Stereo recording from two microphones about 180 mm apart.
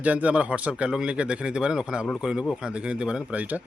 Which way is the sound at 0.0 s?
10° right (ahead or behind).